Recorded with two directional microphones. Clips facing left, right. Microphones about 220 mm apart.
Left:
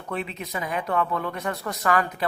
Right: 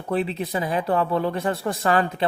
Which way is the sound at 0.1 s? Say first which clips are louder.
Right 7 dB; 35° right (ahead or behind).